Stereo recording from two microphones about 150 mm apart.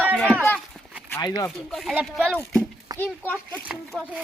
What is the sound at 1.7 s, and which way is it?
Speech, centre (ahead or behind).